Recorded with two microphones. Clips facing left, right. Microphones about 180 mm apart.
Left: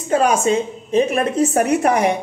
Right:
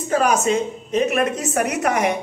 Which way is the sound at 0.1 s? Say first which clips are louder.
Left 2 dB; 30° left (ahead or behind).